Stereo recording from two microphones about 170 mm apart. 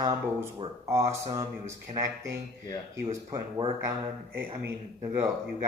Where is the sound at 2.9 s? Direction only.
20° right (ahead or behind).